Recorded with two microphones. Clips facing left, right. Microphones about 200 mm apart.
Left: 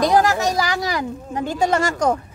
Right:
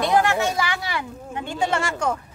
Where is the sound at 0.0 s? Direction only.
40° left (ahead or behind).